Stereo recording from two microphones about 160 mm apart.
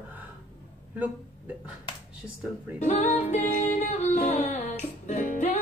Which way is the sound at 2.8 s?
45° left (ahead or behind).